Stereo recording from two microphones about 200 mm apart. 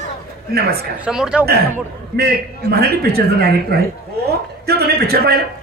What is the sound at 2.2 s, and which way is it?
A man's voice, 50° right (ahead or behind).